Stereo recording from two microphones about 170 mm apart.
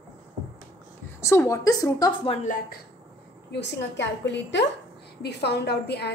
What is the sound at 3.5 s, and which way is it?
A woman's voice, 90° left.